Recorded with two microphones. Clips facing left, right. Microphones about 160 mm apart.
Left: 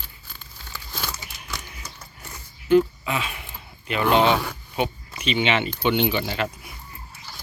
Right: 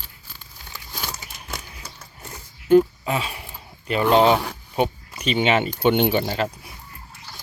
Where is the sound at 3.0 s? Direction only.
35° right (ahead or behind).